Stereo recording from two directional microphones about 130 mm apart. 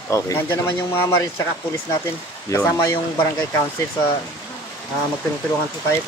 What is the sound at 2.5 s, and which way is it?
Speech, 25° left (ahead or behind).